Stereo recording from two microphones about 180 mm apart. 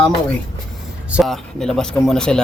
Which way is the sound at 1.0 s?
5° right (ahead or behind).